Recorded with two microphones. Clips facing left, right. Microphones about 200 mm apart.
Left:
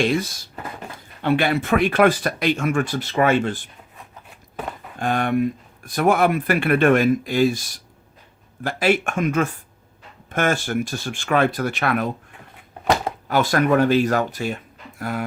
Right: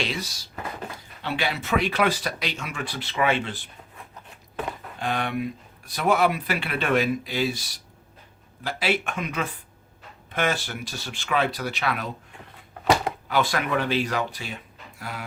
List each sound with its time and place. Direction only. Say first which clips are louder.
0.0 s speech: left 10 dB; 50° left (ahead or behind)
4.9 s speech: left 7 dB; 50° left (ahead or behind)
13.2 s speech: left 8 dB; 45° left (ahead or behind)